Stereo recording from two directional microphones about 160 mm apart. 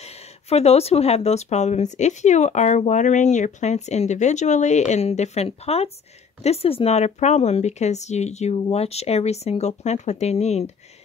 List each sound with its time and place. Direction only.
0.0 s speech: 40° left (ahead or behind)